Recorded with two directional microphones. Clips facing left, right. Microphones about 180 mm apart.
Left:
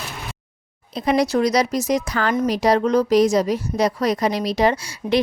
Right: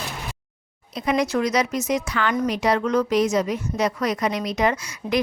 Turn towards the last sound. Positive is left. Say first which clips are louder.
# left 4 dB
turn(degrees=30)  # may be behind; listen again after turning